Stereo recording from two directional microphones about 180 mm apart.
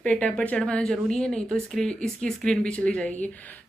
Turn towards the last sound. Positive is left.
turn(degrees=10)  # may be behind; listen again after turning